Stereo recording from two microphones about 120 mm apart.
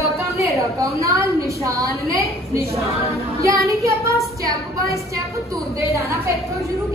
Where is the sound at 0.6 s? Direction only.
25° right (ahead or behind).